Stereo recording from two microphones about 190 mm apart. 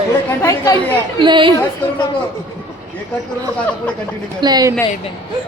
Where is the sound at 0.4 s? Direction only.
20° left (ahead or behind).